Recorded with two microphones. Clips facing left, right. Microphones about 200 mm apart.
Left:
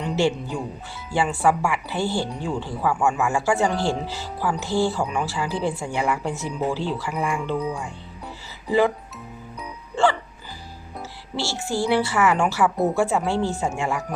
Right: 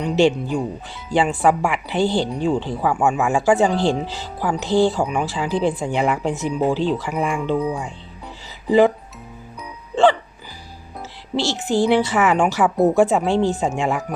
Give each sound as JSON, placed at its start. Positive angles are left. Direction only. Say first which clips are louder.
{"t": 0.0, "sound": "speech", "louder": "right 5 dB", "side_deg": -20}
{"t": 9.9, "sound": "music", "louder": "right 5 dB", "side_deg": -20}
{"t": 11.3, "sound": "speech", "louder": "right 6 dB", "side_deg": -20}